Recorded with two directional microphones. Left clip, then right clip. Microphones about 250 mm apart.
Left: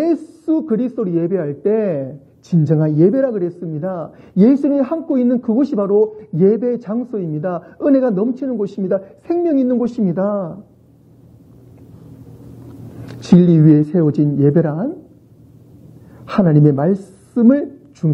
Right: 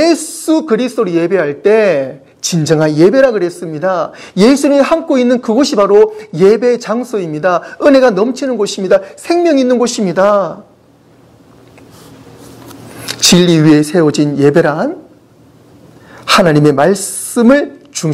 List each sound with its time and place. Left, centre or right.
0.0 s speech: centre
10.1 s speech: centre
12.6 s speech: centre
16.4 s a woman's voice: centre